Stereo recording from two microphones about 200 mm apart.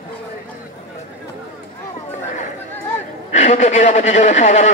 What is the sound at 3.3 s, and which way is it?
Speech, 35° left (ahead or behind).